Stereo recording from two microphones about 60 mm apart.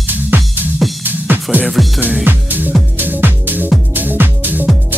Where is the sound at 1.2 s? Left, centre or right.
Right.